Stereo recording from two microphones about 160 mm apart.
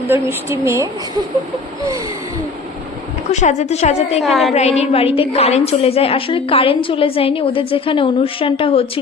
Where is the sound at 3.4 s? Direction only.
45° left (ahead or behind).